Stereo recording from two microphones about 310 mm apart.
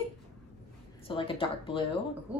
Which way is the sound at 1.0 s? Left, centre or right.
Centre.